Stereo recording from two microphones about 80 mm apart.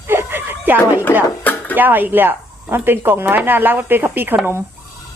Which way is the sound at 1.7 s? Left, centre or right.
Right.